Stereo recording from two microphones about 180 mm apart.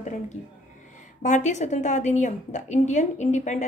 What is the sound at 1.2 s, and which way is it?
A woman's voice, 40° left (ahead or behind).